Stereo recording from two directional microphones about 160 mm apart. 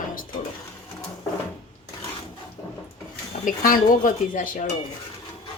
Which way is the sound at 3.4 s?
60° left (ahead or behind).